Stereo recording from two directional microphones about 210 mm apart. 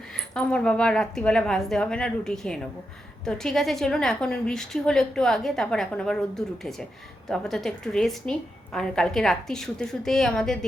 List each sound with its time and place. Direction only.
0.1 s a woman's voice: 5° left (ahead or behind)